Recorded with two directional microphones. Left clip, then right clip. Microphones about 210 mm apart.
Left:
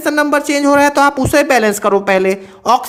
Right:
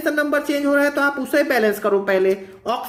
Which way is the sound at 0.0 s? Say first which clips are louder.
Left 6 dB; 40° left (ahead or behind).